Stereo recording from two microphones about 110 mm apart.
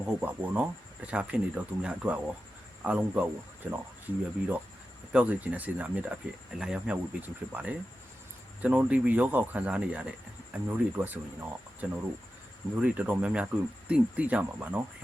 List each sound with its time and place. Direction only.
0.0 s speech: 15° right (ahead or behind)